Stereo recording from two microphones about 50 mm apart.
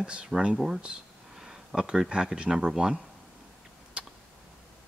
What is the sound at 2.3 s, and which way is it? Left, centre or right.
Speech, centre.